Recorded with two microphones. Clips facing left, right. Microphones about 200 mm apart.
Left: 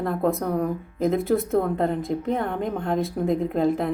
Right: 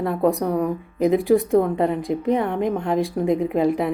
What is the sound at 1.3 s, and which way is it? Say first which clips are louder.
Speech: right 7 dB; 15° right (ahead or behind).